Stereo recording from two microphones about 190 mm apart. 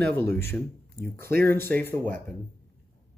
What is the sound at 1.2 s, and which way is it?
Speech, 55° right (ahead or behind).